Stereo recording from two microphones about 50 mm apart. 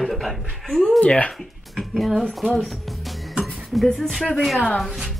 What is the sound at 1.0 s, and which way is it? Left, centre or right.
Speech, left.